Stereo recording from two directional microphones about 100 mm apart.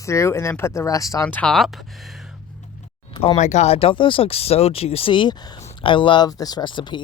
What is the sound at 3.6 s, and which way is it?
Speech, 75° left (ahead or behind).